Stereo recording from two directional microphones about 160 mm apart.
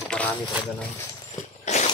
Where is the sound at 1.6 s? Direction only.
45° left (ahead or behind).